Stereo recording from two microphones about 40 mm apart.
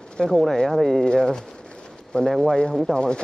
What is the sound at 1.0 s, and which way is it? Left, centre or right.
Speech, left.